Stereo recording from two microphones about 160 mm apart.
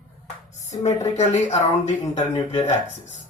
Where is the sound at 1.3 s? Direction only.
45° left (ahead or behind).